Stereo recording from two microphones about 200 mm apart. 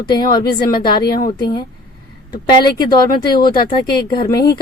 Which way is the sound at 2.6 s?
20° left (ahead or behind).